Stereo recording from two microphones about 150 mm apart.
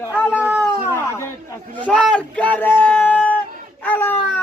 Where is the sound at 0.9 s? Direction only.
20° left (ahead or behind).